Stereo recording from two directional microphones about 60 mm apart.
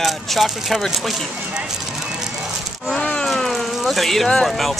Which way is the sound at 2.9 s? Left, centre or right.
Centre.